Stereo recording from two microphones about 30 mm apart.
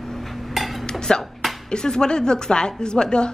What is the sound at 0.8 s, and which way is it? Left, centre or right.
Dishes, left.